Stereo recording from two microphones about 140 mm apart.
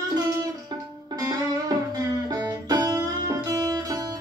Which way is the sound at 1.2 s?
30° right (ahead or behind).